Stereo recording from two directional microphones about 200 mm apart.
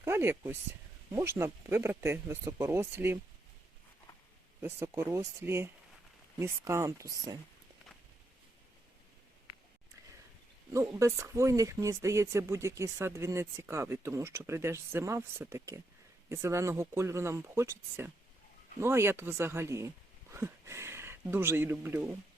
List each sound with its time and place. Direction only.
0.0 s speech: 10° right (ahead or behind)
4.6 s speech: 10° right (ahead or behind)
10.7 s speech: 15° right (ahead or behind)